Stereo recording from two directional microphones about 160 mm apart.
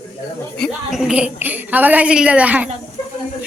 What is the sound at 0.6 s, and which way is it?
A woman's voice, centre (ahead or behind).